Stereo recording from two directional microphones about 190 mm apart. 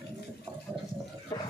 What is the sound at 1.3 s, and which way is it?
Roar, 20° left (ahead or behind).